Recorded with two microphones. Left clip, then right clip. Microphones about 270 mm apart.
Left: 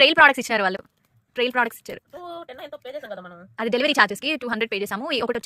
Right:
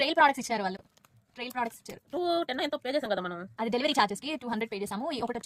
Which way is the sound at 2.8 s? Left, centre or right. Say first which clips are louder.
Right 1 dB; right.